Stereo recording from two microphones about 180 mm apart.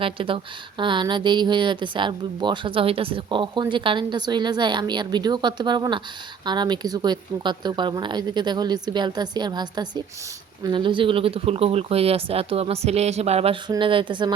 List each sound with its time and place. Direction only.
0.0 s speech: 30° right (ahead or behind)